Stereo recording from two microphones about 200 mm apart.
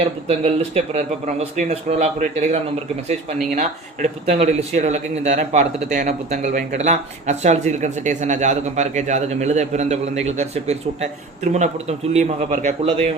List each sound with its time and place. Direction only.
0.3 s a man's voice: 35° right (ahead or behind)